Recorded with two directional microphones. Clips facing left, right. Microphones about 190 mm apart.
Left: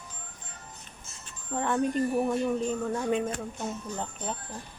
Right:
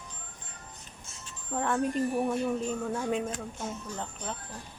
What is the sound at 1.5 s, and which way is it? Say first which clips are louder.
Speech: left 2 dB; centre (ahead or behind).